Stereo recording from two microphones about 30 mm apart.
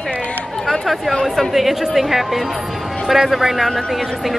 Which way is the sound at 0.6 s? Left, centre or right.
Centre.